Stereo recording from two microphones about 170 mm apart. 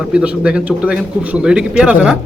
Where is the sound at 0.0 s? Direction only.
5° right (ahead or behind).